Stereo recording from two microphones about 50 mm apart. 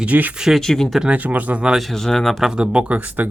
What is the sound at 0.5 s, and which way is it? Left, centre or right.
Speech, centre.